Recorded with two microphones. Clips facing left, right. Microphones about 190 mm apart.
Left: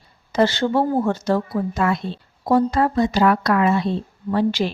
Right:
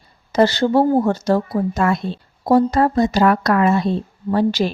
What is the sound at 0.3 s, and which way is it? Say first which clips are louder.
Speech: right 3 dB; 40° right (ahead or behind).